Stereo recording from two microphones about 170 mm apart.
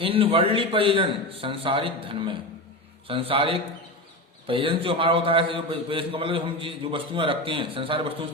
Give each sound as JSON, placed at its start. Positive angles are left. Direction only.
{"t": 0.0, "sound": "a man's voice", "side_deg": -30}